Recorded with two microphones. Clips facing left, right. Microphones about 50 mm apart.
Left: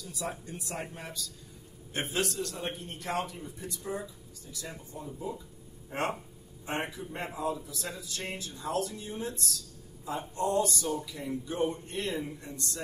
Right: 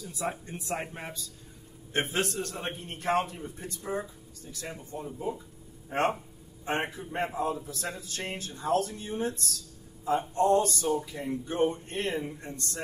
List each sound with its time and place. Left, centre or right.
0.0 s a man's voice: right